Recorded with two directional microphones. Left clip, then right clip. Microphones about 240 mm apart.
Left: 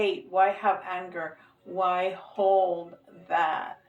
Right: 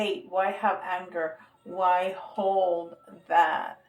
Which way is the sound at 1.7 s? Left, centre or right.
Right.